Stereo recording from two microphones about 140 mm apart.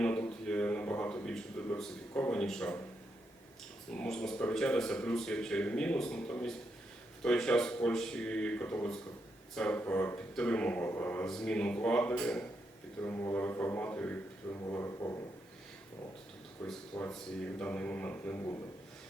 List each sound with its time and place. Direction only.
0.0 s a sound: 10° left (ahead or behind)
3.9 s speech: 5° left (ahead or behind)
16.6 s speech: 5° left (ahead or behind)